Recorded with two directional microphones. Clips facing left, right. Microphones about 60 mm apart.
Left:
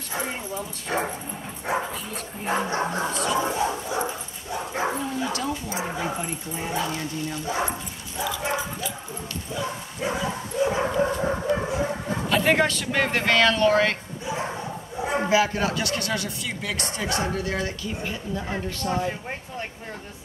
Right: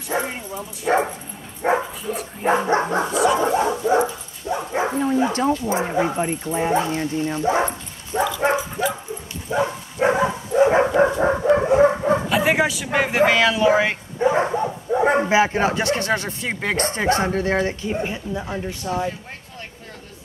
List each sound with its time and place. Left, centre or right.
0.1 s speech: right
3.1 s speech: centre
3.3 s speech: right
4.0 s dog: right
4.9 s speech: right
9.5 s dog: right
12.3 s a man's voice: centre
14.2 s dog: right
15.1 s speech: right
18.8 s speech: centre